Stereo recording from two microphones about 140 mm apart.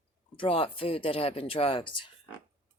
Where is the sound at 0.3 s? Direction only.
40° left (ahead or behind).